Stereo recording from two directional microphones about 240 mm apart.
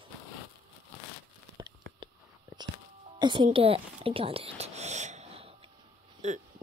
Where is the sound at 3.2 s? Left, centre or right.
Centre.